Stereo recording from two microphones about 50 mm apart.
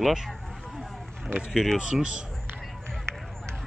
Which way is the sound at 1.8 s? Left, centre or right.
Centre.